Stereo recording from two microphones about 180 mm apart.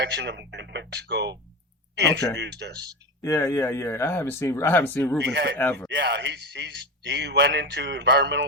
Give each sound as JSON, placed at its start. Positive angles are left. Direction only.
{"t": 0.0, "sound": "a man's voice", "side_deg": -70}
{"t": 3.2, "sound": "speech", "side_deg": 15}
{"t": 5.2, "sound": "a man's voice", "side_deg": -70}